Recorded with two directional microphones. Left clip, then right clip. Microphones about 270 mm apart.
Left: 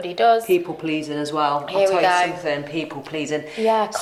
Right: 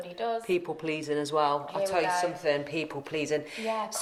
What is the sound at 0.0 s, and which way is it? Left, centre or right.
Speech, left.